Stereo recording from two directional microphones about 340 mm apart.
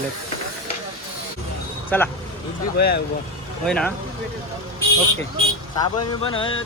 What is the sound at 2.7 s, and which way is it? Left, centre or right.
Speech, left.